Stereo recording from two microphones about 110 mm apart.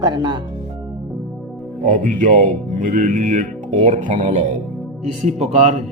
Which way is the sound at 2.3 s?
90° right.